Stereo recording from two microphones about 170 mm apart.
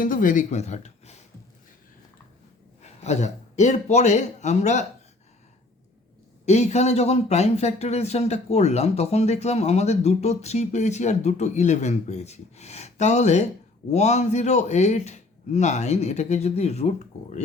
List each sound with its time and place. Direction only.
0.0 s speech: 50° left (ahead or behind)
2.8 s a man's voice: 40° left (ahead or behind)
6.4 s speech: 40° left (ahead or behind)